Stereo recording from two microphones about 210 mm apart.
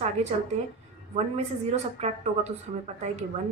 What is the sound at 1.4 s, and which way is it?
A woman's voice, 30° right (ahead or behind).